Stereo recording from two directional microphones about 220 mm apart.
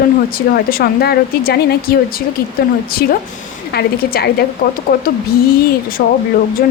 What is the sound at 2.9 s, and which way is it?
Speech, 40° left (ahead or behind).